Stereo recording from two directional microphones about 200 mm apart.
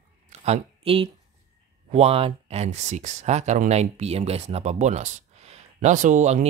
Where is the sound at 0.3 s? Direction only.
30° right (ahead or behind).